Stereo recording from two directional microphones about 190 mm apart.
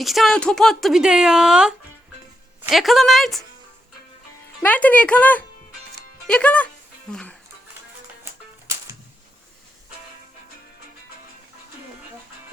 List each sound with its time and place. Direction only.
0.0 s a woman's voice: centre (ahead or behind)
4.6 s a woman's voice: 10° left (ahead or behind)
8.2 s music: 15° right (ahead or behind)